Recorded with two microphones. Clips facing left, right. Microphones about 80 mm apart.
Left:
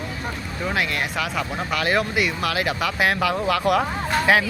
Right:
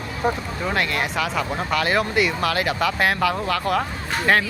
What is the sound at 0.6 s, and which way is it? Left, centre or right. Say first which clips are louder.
Speech: right 1 dB; centre.